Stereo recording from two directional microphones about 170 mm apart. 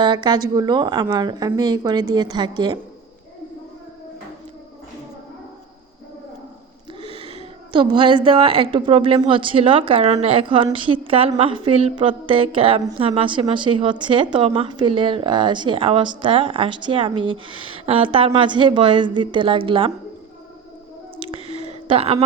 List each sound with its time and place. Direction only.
0.0 s a woman's voice: 25° right (ahead or behind)
7.0 s a woman's voice: 35° right (ahead or behind)
21.2 s a sound: 35° right (ahead or behind)